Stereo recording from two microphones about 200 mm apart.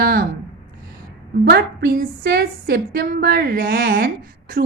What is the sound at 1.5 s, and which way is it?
A woman's voice, 50° right (ahead or behind).